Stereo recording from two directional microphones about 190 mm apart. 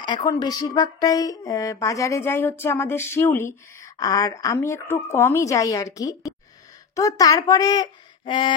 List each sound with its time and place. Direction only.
0.0 s speech: 20° left (ahead or behind)